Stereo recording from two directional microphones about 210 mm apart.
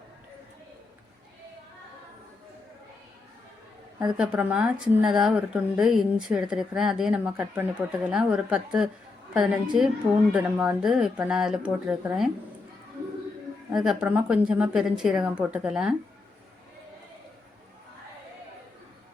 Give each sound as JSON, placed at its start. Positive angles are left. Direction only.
{"t": 4.0, "sound": "a woman's voice", "side_deg": -5}
{"t": 13.7, "sound": "speech", "side_deg": -5}